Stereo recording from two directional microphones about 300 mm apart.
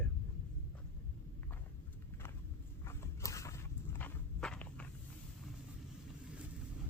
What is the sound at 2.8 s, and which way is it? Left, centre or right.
Walk, centre.